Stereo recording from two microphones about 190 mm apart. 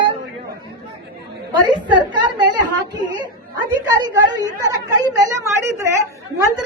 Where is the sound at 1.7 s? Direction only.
25° right (ahead or behind).